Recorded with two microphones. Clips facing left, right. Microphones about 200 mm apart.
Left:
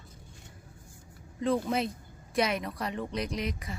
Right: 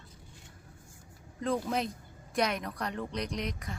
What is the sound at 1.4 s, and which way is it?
A woman's voice, centre (ahead or behind).